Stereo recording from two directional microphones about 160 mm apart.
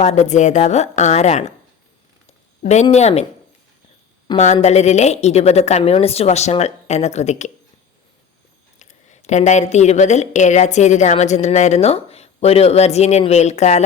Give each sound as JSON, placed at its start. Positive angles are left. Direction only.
{"t": 0.0, "sound": "a woman's voice", "side_deg": 45}
{"t": 2.9, "sound": "a woman's voice", "side_deg": 45}
{"t": 4.3, "sound": "speech", "side_deg": 25}
{"t": 4.6, "sound": "a woman's voice", "side_deg": 45}
{"t": 8.8, "sound": "a woman's voice", "side_deg": 50}